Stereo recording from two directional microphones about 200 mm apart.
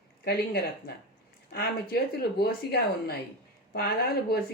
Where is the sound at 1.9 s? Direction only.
50° left (ahead or behind).